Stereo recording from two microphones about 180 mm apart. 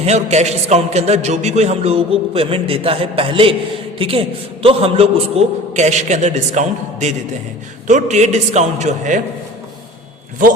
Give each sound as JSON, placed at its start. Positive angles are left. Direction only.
{"t": 0.0, "sound": "a man's voice", "side_deg": -40}